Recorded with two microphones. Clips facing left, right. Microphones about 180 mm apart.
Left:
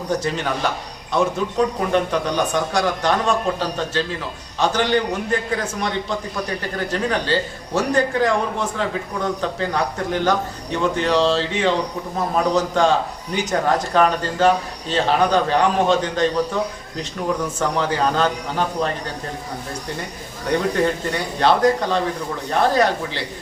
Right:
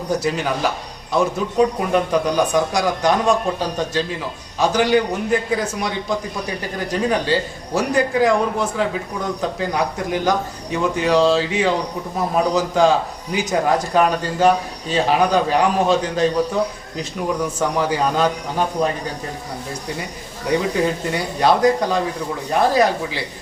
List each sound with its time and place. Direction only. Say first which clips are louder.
0.1 s a man's voice: right 2 dB; 10° right (ahead or behind)
17.6 s a man's voice: right 1 dB; 10° right (ahead or behind)
20.5 s a man's voice: even; 5° right (ahead or behind)